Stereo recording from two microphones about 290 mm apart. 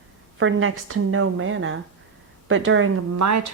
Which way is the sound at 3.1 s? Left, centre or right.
Right.